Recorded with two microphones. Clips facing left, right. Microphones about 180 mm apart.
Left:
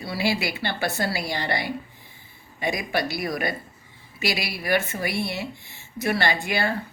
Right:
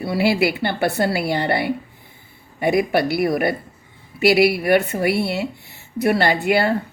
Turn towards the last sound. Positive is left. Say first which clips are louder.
# right 7 dB
turn(degrees=-65)  # may be behind; listen again after turning